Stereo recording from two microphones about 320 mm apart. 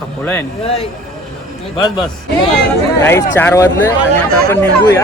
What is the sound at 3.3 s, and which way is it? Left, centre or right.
Speech, centre.